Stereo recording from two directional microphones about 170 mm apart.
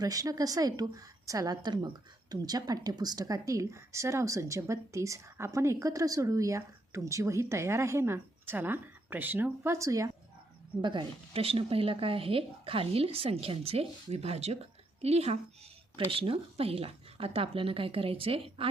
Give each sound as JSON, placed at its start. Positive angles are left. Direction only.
{"t": 0.0, "sound": "a woman's voice", "side_deg": -20}